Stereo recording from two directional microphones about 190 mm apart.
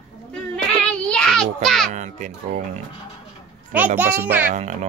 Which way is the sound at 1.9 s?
40° right (ahead or behind).